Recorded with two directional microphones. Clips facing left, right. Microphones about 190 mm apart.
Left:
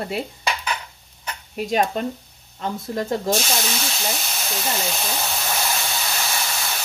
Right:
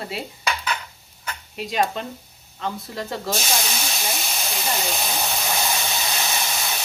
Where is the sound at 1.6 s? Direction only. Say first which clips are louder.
Left 3 dB; 45° left (ahead or behind).